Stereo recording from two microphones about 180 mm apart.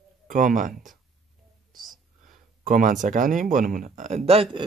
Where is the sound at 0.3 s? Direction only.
50° right (ahead or behind).